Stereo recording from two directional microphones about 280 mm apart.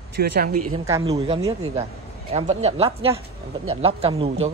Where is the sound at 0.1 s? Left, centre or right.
Right.